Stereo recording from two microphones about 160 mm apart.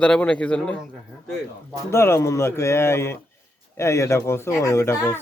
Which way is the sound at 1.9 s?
15° left (ahead or behind).